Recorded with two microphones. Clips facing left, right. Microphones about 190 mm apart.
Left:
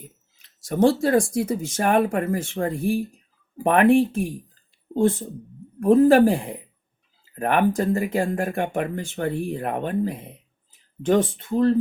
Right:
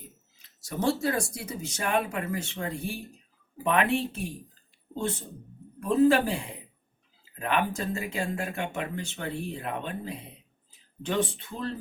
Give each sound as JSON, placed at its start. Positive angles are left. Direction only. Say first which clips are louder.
{"t": 0.7, "sound": "speech", "louder": "left 9 dB", "side_deg": 50}
{"t": 5.8, "sound": "speech", "louder": "left 7 dB", "side_deg": 55}